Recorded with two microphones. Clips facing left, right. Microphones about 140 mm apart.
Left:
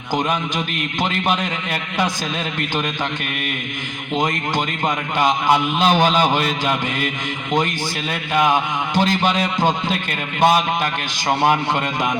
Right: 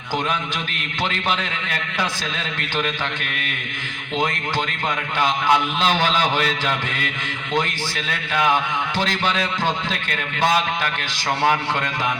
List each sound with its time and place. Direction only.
1.0 s a man's voice: 15° left (ahead or behind)
4.1 s a man's voice: 15° left (ahead or behind)